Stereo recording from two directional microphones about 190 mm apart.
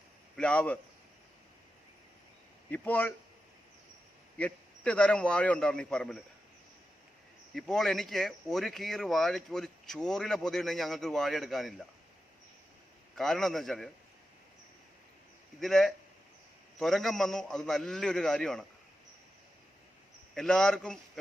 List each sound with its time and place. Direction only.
0.3 s speech: 5° left (ahead or behind)
2.6 s a man's voice: 10° left (ahead or behind)
4.4 s speech: 5° left (ahead or behind)
7.5 s speech: centre (ahead or behind)
13.1 s speech: centre (ahead or behind)
15.6 s speech: centre (ahead or behind)
20.3 s speech: 5° left (ahead or behind)